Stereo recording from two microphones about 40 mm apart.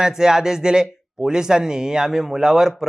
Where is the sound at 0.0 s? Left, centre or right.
Centre.